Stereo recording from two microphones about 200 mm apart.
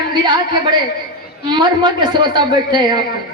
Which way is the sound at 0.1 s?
20° right (ahead or behind).